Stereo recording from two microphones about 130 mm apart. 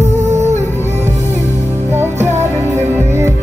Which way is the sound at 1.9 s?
20° right (ahead or behind).